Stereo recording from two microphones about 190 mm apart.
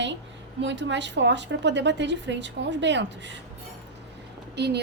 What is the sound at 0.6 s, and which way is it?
A woman's voice, 70° right (ahead or behind).